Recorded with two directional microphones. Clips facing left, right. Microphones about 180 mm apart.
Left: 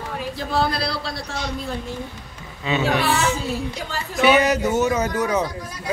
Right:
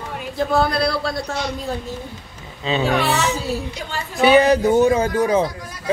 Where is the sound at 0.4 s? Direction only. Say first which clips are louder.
Right 5 dB; 50° right (ahead or behind).